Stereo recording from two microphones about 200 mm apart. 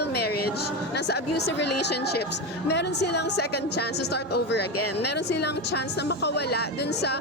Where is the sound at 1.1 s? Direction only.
55° left (ahead or behind).